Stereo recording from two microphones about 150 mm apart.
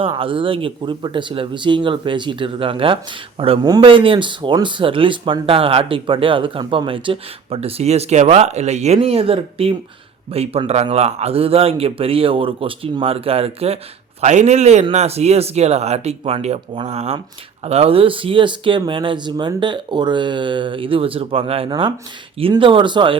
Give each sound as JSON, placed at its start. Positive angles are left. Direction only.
{"t": 0.0, "sound": "speech", "side_deg": -35}